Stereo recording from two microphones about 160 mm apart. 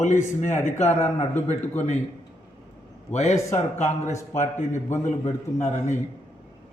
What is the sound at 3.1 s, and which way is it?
A man's voice, 45° left (ahead or behind).